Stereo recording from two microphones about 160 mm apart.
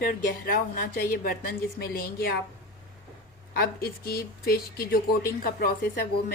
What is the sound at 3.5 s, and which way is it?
A woman's voice, 70° left (ahead or behind).